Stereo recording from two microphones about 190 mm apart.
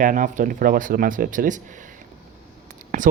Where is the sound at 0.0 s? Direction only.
45° right (ahead or behind).